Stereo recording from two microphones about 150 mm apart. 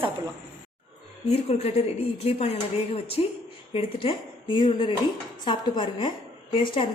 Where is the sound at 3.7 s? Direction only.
35° left (ahead or behind).